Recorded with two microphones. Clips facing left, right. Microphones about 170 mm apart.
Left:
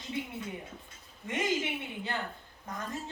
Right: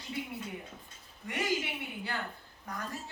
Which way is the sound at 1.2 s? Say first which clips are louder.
Left 2 dB; 20° left (ahead or behind).